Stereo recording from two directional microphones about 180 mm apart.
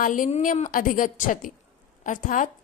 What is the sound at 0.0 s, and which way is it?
A woman's voice, 45° left (ahead or behind).